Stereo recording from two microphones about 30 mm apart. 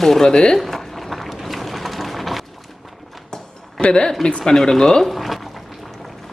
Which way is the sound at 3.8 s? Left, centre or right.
Left.